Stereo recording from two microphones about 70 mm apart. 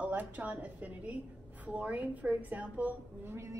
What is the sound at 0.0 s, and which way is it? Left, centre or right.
A woman's voice, right.